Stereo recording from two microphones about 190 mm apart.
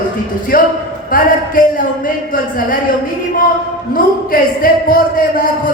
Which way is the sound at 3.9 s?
50° left (ahead or behind).